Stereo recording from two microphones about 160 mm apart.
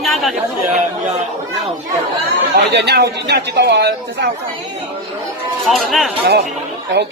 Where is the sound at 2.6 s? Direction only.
90° right.